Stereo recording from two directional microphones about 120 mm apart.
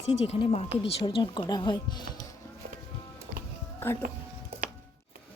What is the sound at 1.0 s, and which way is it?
Speech, 40° left (ahead or behind).